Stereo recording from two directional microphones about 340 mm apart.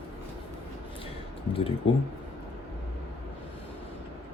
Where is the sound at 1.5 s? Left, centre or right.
Centre.